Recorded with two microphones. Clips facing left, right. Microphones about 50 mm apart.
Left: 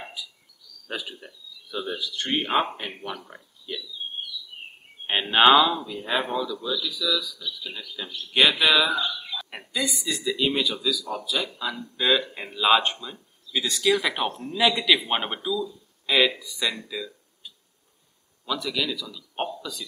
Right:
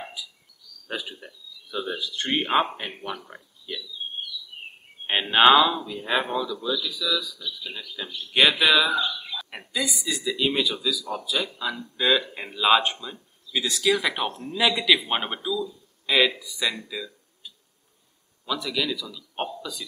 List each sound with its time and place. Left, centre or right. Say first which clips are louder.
0.0 s a sound: right 1 dB; centre
0.8 s speech: right 1 dB; centre
2.0 s speech: right 1 dB; centre
2.5 s speech: right 2 dB; centre
5.0 s speech: right 1 dB; centre